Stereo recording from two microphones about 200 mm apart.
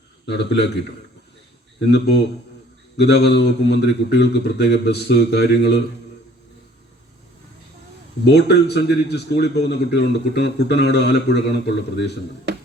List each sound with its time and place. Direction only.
0.3 s a man's voice: 55° left (ahead or behind)
1.9 s a man's voice: 55° left (ahead or behind)
8.2 s a man's voice: 55° left (ahead or behind)